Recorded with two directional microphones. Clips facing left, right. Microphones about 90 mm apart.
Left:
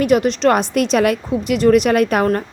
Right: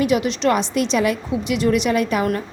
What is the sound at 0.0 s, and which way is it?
Speech, 45° left (ahead or behind).